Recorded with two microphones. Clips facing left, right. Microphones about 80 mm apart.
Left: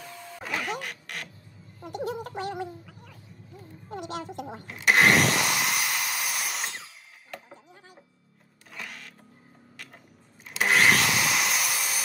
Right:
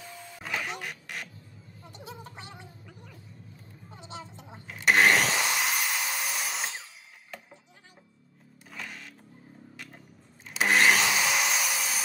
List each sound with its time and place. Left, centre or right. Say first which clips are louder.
0.4 s a sound: left 3 dB; centre
1.8 s a child's voice: left 13 dB; left
2.9 s a sound: even; centre
3.9 s a woman's voice: left 9 dB; left
4.8 s wood: left 2 dB; centre
8.7 s music: left 1 dB; centre
10.6 s wood: left 1 dB; centre